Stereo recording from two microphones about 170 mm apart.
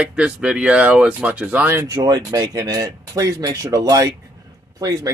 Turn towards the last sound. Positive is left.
turn(degrees=-20)  # may be behind; listen again after turning